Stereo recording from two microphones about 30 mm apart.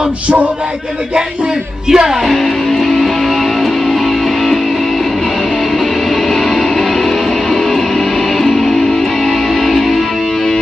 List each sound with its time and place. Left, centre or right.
1.9 s music: centre
2.2 s music: centre
6.2 s music: centre
8.4 s music: centre